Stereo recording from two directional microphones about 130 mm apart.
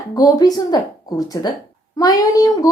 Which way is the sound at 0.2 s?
30° left (ahead or behind).